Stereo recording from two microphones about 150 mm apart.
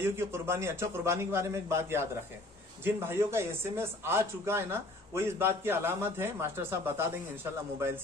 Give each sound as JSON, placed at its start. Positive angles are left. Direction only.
{"t": 0.0, "sound": "speech", "side_deg": -15}